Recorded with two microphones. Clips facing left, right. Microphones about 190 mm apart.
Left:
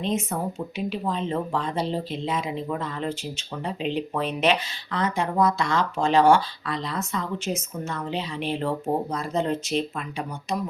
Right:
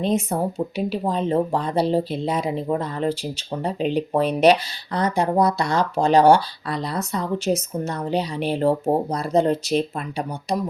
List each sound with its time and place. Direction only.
0.0 s speech: 35° right (ahead or behind)